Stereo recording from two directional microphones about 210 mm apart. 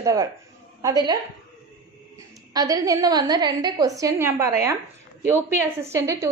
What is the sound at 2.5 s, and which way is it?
A woman's voice, 15° right (ahead or behind).